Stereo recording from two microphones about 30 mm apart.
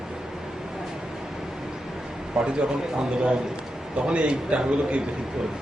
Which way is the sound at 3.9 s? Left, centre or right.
Right.